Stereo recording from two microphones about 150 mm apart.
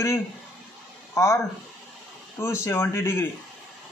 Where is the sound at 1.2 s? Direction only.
20° left (ahead or behind).